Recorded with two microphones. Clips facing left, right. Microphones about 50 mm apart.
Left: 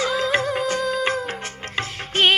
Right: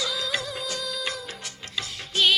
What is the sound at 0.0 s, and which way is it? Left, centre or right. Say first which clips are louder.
Music of bollywood: left 8 dB; left.